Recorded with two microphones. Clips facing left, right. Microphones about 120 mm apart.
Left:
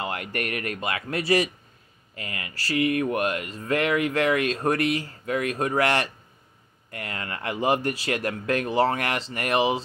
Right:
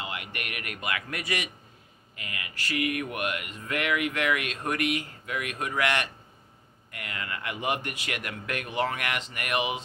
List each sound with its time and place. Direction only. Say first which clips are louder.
0.0 s speech: left 7 dB; 45° left (ahead or behind)